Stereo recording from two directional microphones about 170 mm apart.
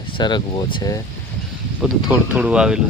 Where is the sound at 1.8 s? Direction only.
5° right (ahead or behind).